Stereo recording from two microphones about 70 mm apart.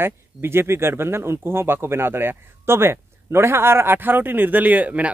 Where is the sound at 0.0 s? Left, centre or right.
Right.